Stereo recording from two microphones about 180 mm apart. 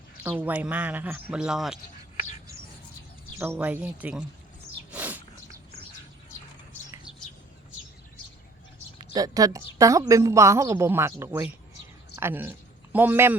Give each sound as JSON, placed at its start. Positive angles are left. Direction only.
{"t": 0.2, "sound": "a woman's voice", "side_deg": -10}
{"t": 3.3, "sound": "a woman's voice", "side_deg": -15}
{"t": 4.9, "sound": "a sound", "side_deg": -10}
{"t": 9.1, "sound": "a woman's voice", "side_deg": -20}